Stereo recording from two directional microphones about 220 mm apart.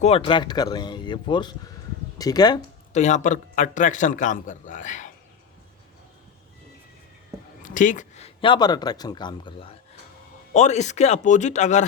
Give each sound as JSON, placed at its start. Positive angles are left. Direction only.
{"t": 0.0, "sound": "speech", "side_deg": 25}
{"t": 2.9, "sound": "a man's voice", "side_deg": 30}
{"t": 7.6, "sound": "a man's voice", "side_deg": 35}